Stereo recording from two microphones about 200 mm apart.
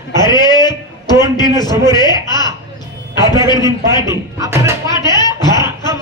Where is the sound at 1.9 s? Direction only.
20° left (ahead or behind).